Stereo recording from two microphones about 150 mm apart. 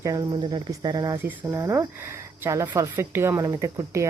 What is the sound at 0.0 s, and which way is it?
Speech, 25° right (ahead or behind).